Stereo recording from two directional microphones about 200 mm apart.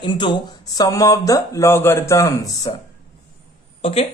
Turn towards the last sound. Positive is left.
turn(degrees=30)  # may be behind; listen again after turning